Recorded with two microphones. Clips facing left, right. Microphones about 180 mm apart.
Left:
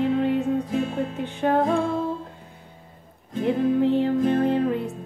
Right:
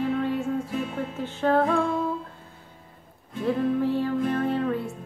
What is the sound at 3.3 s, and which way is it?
Music, 20° left (ahead or behind).